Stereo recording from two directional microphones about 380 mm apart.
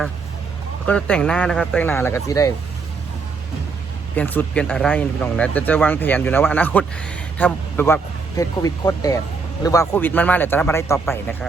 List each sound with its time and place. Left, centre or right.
0.9 s speech: centre
4.1 s speech: centre